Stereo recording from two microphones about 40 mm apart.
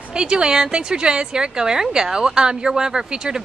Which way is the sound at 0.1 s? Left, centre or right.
Centre.